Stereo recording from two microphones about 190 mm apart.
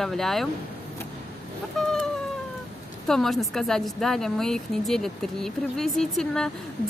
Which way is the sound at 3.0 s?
Centre (ahead or behind).